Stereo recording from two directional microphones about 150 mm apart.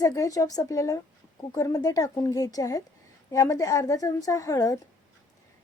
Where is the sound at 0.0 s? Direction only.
20° left (ahead or behind).